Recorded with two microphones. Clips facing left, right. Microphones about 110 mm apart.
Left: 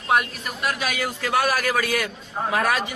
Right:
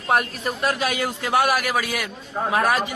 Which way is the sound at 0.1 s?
35° right (ahead or behind).